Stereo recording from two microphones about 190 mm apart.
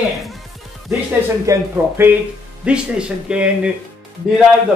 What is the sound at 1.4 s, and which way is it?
A man's voice, 10° right (ahead or behind).